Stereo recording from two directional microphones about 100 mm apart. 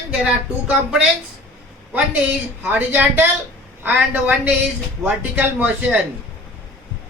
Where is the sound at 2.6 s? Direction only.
15° right (ahead or behind).